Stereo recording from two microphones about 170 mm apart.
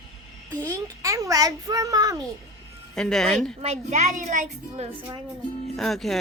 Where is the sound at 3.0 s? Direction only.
5° left (ahead or behind).